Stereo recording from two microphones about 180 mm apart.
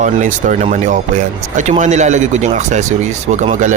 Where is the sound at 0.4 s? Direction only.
40° right (ahead or behind).